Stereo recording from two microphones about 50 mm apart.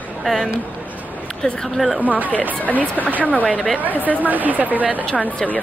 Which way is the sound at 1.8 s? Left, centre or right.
Centre.